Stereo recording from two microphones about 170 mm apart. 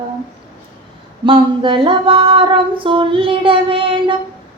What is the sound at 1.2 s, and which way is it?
Female singing, 30° right (ahead or behind).